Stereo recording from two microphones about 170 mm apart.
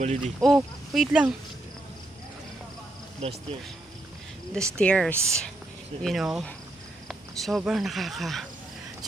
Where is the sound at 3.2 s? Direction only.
40° right (ahead or behind).